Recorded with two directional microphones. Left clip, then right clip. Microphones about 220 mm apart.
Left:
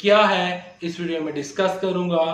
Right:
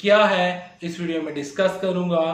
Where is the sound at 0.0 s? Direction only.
5° left (ahead or behind).